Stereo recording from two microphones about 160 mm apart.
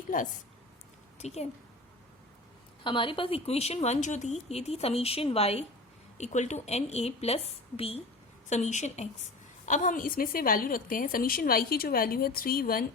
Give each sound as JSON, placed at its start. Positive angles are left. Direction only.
{"t": 0.1, "sound": "a woman's voice", "side_deg": 60}
{"t": 1.2, "sound": "a woman's voice", "side_deg": 40}
{"t": 2.8, "sound": "a woman's voice", "side_deg": 30}